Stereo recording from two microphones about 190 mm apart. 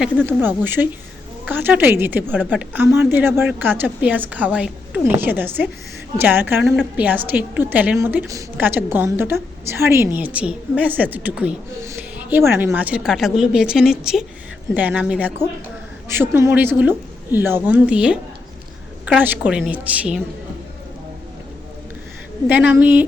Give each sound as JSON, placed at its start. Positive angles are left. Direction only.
{"t": 0.3, "sound": "a woman's voice", "side_deg": -10}
{"t": 22.4, "sound": "a woman's voice", "side_deg": -10}